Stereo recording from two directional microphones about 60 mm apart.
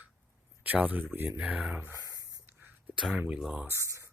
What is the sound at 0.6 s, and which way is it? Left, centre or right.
Speech, right.